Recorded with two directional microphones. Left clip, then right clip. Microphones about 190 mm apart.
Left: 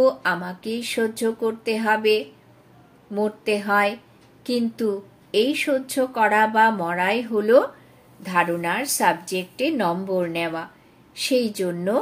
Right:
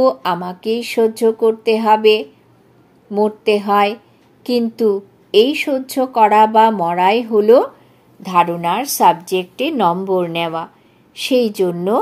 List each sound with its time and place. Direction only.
0.0 s a woman's voice: 35° right (ahead or behind)
9.8 s a woman's voice: 35° right (ahead or behind)